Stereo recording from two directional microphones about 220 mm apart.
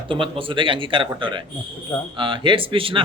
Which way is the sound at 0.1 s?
25° right (ahead or behind).